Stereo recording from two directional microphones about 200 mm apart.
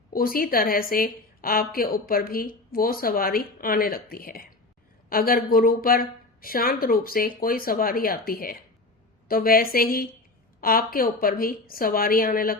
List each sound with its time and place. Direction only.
0.1 s a woman's voice: 45° left (ahead or behind)